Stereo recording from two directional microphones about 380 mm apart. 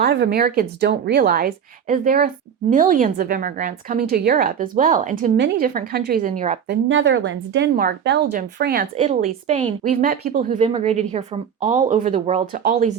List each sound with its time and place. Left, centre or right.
0.0 s speech: right